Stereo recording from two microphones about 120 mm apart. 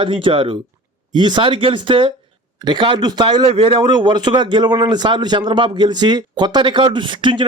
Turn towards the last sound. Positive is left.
turn(degrees=-40)  # may be behind; listen again after turning